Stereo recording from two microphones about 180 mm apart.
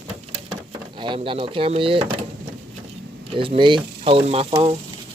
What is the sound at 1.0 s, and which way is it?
Speech, 25° right (ahead or behind).